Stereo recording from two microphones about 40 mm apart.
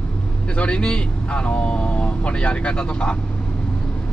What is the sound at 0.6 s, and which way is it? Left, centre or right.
Speech, left.